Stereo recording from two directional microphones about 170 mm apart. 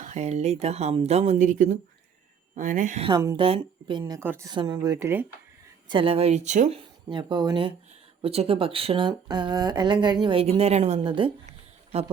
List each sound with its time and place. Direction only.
0.0 s speech: 45° right (ahead or behind)
3.3 s speech: 30° right (ahead or behind)
4.0 s a woman's voice: 15° right (ahead or behind)
5.9 s speech: 30° right (ahead or behind)